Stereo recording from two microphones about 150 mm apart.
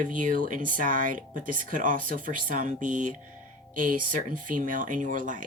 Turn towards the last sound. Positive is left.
turn(degrees=-60)  # may be behind; listen again after turning